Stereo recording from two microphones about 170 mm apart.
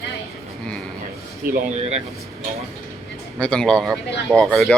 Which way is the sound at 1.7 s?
40° right (ahead or behind).